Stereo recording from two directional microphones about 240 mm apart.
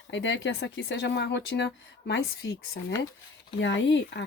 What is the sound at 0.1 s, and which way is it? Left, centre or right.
Speech, left.